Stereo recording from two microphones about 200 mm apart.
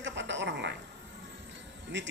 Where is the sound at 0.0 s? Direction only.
65° right (ahead or behind).